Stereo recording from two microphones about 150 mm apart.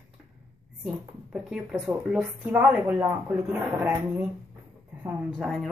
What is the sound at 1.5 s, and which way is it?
Speech, 5° right (ahead or behind).